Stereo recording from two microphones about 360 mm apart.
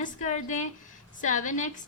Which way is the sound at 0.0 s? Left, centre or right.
Centre.